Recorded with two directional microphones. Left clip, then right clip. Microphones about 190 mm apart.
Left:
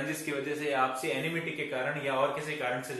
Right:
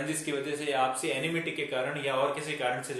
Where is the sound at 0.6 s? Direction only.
35° right (ahead or behind).